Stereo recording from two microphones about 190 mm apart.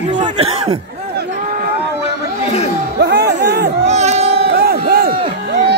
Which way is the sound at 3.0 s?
60° right (ahead or behind).